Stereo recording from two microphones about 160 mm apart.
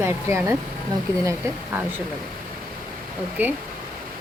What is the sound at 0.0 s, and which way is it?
A woman's voice, 15° right (ahead or behind).